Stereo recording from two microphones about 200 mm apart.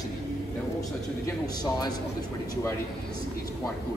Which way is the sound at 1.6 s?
20° left (ahead or behind).